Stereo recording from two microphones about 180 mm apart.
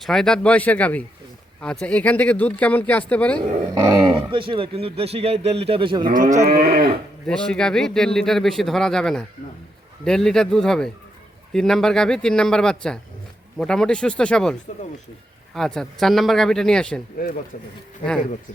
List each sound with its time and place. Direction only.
0.0 s speech: centre (ahead or behind)
3.8 s speech: 20° right (ahead or behind)
6.1 s cattle: 45° right (ahead or behind)
7.3 s speech: 5° left (ahead or behind)
15.5 s speech: 5° left (ahead or behind)